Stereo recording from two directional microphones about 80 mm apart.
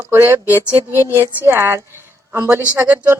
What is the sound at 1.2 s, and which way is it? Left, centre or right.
A woman's voice, right.